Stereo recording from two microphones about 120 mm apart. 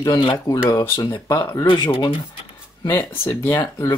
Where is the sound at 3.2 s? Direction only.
20° left (ahead or behind).